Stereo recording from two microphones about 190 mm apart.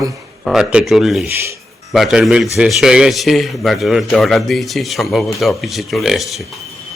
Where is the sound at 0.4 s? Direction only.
5° right (ahead or behind).